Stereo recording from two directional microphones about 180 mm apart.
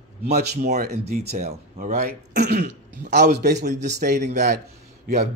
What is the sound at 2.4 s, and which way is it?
A man's voice, 65° right (ahead or behind).